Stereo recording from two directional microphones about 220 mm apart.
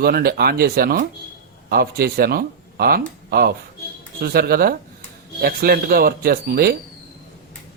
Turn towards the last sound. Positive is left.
turn(degrees=-45)  # may be behind; listen again after turning